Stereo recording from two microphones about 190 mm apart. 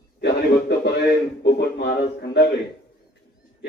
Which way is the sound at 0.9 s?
60° left (ahead or behind).